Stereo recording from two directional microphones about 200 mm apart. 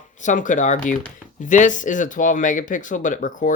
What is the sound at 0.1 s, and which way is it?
Speech, 40° left (ahead or behind).